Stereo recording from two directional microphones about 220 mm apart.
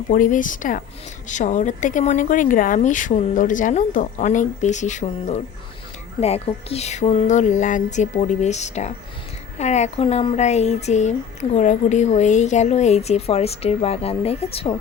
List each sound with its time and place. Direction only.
0.1 s speech: 35° left (ahead or behind)